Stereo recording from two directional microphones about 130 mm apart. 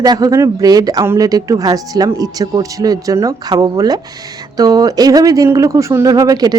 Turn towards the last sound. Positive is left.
turn(degrees=-30)  # may be behind; listen again after turning